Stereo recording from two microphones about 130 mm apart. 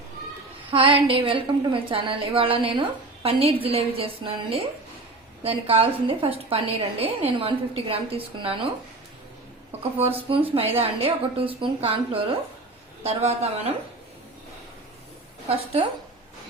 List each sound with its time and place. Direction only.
0.7 s a woman's voice: 45° right (ahead or behind)
10.0 s a woman's voice: 45° right (ahead or behind)
13.0 s a woman's voice: 55° right (ahead or behind)
15.4 s a woman's voice: 50° right (ahead or behind)